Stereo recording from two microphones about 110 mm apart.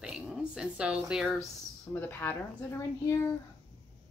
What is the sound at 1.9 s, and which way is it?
Speech, 20° left (ahead or behind).